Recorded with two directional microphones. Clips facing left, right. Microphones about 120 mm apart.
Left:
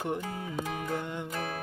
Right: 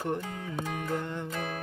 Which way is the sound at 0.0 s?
15° left (ahead or behind).